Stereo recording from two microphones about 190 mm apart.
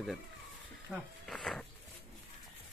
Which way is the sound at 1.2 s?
Centre (ahead or behind).